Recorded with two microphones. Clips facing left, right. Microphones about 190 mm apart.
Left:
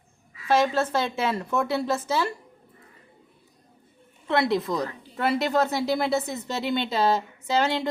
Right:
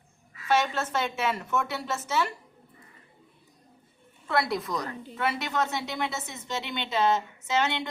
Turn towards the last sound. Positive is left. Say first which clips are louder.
# left 4 dB
turn(degrees=35)  # may be behind; listen again after turning